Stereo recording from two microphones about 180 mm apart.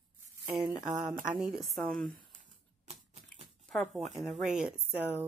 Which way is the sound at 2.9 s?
35° right (ahead or behind).